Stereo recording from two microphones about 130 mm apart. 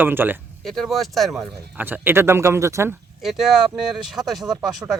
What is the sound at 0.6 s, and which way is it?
Speech, centre (ahead or behind).